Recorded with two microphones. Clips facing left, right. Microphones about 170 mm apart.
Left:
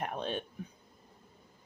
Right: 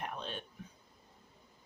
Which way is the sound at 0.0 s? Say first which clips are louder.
Left 6 dB; 55° left (ahead or behind).